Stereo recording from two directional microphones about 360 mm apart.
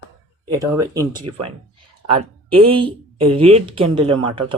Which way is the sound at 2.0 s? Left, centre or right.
Centre.